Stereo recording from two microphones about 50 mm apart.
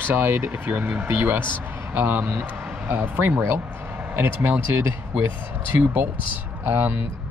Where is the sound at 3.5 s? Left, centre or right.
Right.